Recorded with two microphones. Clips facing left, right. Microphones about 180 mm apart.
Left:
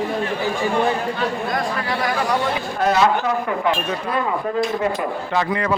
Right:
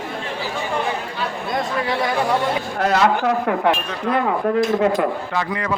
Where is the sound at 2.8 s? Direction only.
65° right (ahead or behind).